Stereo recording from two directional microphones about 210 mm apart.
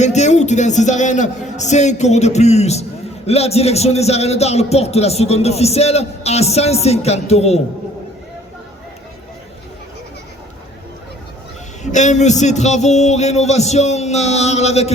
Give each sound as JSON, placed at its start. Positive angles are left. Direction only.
{"t": 0.0, "sound": "a man's voice", "side_deg": 35}
{"t": 11.8, "sound": "a man's voice", "side_deg": 35}